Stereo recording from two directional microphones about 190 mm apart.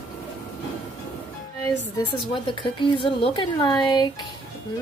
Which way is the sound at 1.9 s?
25° left (ahead or behind).